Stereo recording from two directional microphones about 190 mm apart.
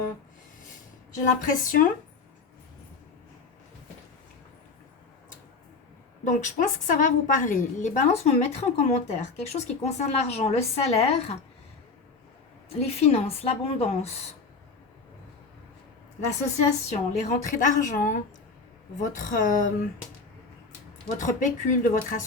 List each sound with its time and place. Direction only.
1.5 s speech: 45° left (ahead or behind)
6.2 s a woman's voice: 40° left (ahead or behind)
12.6 s a woman's voice: 35° left (ahead or behind)
16.6 s a woman's voice: 35° left (ahead or behind)
21.2 s a woman's voice: 40° left (ahead or behind)